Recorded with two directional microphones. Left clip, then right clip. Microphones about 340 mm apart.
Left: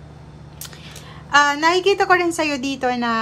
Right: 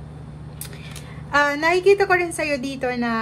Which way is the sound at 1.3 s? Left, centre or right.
Centre.